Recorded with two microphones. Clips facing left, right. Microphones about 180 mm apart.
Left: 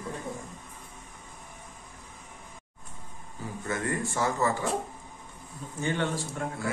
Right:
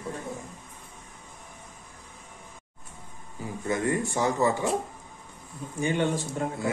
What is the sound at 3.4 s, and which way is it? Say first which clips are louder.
A man's voice: right 4 dB; 15° right (ahead or behind).